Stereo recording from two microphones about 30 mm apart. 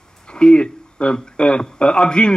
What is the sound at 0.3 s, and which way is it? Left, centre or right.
A man's voice, left.